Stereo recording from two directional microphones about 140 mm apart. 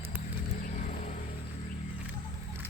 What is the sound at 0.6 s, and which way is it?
Vehicle, 60° left (ahead or behind).